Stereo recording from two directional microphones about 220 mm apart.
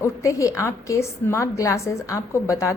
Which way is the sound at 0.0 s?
15° left (ahead or behind).